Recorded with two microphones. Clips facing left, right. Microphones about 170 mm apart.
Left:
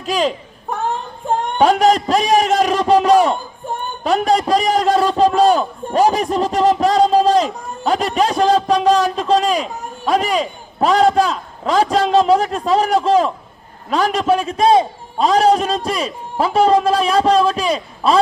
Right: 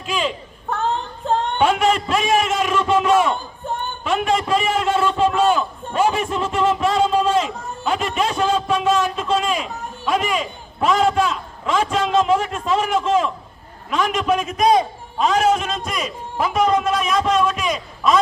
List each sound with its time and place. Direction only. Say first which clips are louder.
0.0 s a man's voice: left 5 dB; 40° left (ahead or behind)
1.5 s a man's voice: left 6 dB; 40° left (ahead or behind)